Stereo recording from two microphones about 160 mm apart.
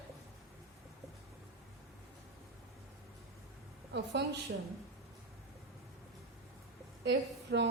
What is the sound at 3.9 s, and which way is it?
Speech, 90° right.